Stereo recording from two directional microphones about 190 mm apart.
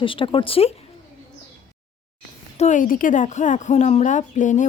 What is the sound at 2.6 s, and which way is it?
Speech, 40° left (ahead or behind).